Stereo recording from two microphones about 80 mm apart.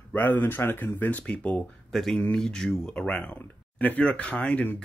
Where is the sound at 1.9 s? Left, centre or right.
Centre; by 4.8 s left.